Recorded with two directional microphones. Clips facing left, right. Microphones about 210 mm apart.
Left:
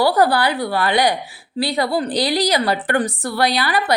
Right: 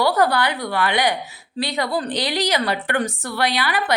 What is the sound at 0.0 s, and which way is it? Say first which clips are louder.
A woman's voice: left 3 dB; 30° left (ahead or behind).